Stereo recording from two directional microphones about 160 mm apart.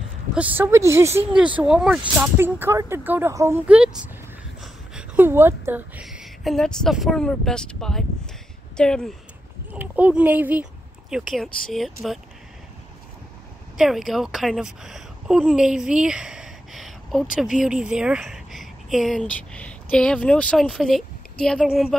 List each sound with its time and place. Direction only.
0.6 s speech: 15° right (ahead or behind)
2.2 s a woman's voice: 15° right (ahead or behind)
6.0 s speech: centre (ahead or behind)
9.7 s speech: 10° right (ahead or behind)
13.7 s speech: centre (ahead or behind)